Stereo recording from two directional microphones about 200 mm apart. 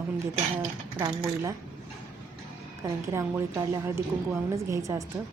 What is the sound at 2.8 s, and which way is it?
A woman's voice, 15° right (ahead or behind).